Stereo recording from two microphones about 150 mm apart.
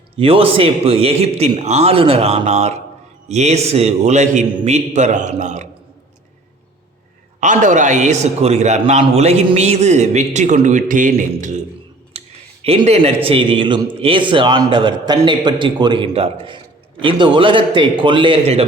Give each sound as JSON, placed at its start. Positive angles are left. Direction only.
{"t": 0.2, "sound": "a man's voice", "side_deg": -40}
{"t": 7.3, "sound": "a man's voice", "side_deg": -55}
{"t": 12.1, "sound": "a sound", "side_deg": -40}
{"t": 12.6, "sound": "a man's voice", "side_deg": -45}